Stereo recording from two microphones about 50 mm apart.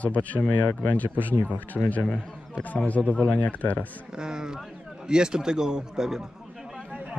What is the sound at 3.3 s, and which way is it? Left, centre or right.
Speech, left.